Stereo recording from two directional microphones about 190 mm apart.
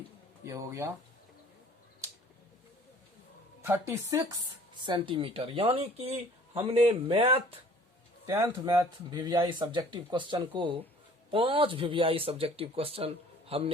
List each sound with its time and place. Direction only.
0.4 s speech: 15° right (ahead or behind)
3.6 s speech: 15° right (ahead or behind); by 7.4 s 30° right (ahead or behind)
8.3 s speech: 15° right (ahead or behind)